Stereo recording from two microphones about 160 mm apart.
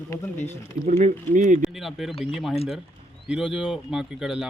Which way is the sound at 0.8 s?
45° right (ahead or behind).